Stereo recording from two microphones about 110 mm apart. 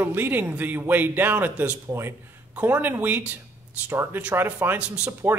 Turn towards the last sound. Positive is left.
turn(degrees=-20)  # may be behind; listen again after turning